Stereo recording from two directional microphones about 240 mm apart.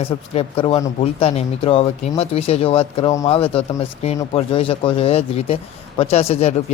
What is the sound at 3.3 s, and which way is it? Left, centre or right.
A man's voice, left.